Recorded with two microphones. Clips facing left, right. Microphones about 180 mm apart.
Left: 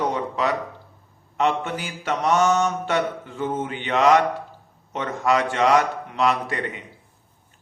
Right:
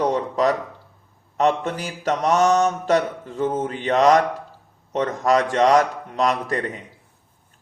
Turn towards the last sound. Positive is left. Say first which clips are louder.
# right 2 dB
turn(degrees=-40)  # may be behind; listen again after turning